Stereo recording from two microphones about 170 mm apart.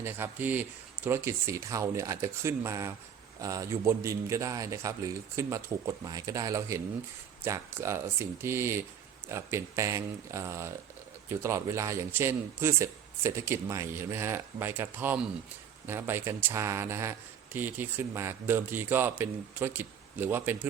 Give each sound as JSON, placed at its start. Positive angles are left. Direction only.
{"t": 0.0, "sound": "a man's voice", "side_deg": -10}